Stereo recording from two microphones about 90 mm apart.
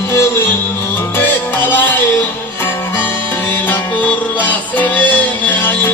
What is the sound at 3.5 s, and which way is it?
Music, 20° left (ahead or behind).